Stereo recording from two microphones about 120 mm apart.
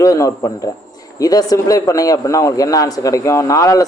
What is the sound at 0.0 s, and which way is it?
A man's voice, 25° left (ahead or behind).